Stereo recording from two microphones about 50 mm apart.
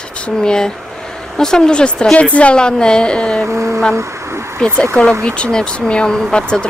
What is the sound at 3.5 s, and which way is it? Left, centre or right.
Speech, right.